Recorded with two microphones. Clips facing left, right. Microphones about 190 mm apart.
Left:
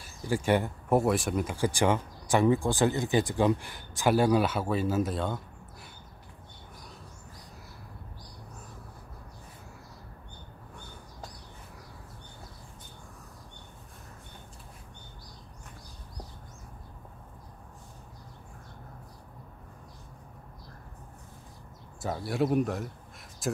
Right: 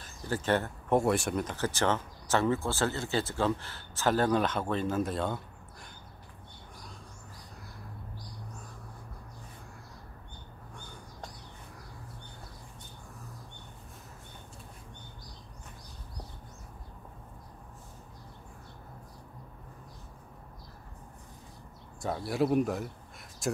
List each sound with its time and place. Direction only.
0.0 s speech: 10° left (ahead or behind)
22.0 s speech: centre (ahead or behind)